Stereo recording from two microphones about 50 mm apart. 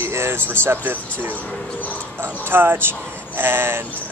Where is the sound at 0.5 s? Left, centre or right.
Right.